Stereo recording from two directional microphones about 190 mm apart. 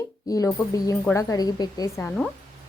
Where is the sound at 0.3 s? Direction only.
20° left (ahead or behind).